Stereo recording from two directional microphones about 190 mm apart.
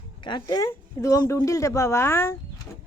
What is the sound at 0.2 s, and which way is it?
Speech, 25° left (ahead or behind).